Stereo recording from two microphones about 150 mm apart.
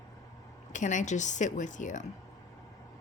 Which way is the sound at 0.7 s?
55° left (ahead or behind).